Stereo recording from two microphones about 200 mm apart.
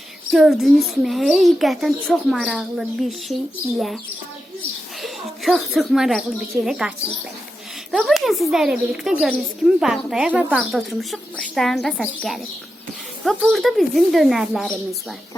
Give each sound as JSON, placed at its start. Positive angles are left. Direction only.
{"t": 0.3, "sound": "a woman's voice", "side_deg": 0}
{"t": 5.0, "sound": "a woman's voice", "side_deg": 0}